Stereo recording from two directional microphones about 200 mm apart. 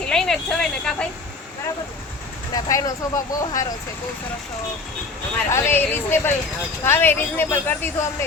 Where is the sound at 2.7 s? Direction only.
15° left (ahead or behind).